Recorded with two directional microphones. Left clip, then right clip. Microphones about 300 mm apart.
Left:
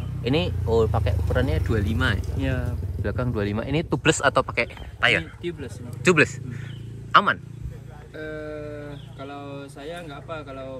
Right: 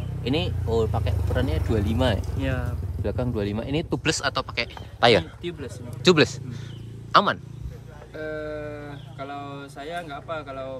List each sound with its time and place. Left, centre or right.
0.0 s speech: centre
5.0 s speech: centre
5.4 s a man's voice: centre